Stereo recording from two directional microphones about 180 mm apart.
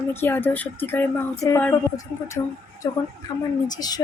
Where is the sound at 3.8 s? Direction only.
20° left (ahead or behind).